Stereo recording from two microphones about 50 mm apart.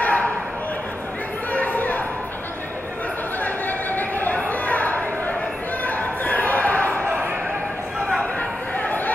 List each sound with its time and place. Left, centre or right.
0.0 s bow-wow: left
1.5 s chatter: left
3.4 s chatter: left
4.5 s a sound: left
8.2 s chatter: left